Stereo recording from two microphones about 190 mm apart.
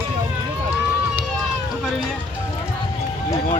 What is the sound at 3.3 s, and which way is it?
Music, 40° left (ahead or behind).